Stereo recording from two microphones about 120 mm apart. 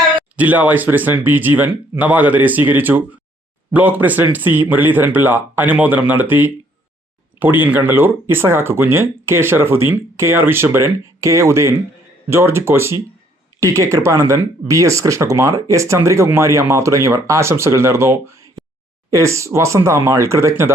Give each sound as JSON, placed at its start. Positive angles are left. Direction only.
{"t": 0.3, "sound": "speech", "side_deg": -15}
{"t": 7.6, "sound": "speech", "side_deg": -15}